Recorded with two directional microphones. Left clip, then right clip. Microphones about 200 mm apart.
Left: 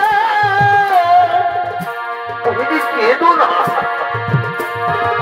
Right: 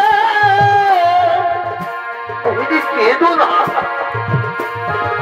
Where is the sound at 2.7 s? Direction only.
10° right (ahead or behind).